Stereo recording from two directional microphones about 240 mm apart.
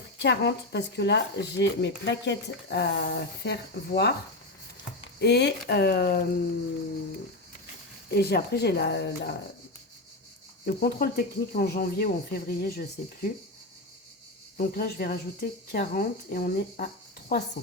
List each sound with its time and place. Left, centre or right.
0.2 s speech: left
8.1 s speech: left
10.7 s speech: left
14.6 s speech: left